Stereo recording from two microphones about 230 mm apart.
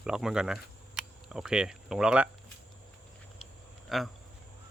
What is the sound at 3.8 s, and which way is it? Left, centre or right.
Speech, centre.